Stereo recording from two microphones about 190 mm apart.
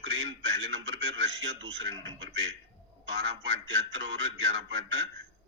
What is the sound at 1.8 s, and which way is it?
A man's voice, 85° right.